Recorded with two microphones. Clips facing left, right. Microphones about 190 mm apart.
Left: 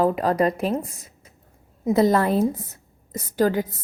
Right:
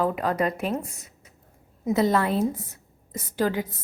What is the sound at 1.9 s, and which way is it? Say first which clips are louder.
A woman's voice: left 4 dB; 40° left (ahead or behind).